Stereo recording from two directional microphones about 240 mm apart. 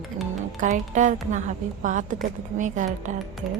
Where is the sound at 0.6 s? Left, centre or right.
Right.